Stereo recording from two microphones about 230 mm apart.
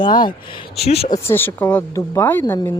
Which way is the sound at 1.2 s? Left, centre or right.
Centre.